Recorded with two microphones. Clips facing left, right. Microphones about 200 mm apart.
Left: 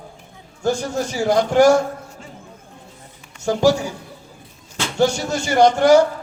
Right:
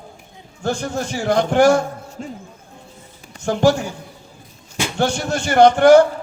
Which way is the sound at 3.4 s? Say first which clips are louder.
Even; 55° right (ahead or behind).